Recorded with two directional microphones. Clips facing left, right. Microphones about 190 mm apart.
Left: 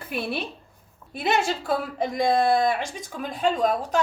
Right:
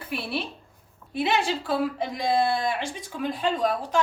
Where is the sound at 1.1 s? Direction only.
45° left (ahead or behind).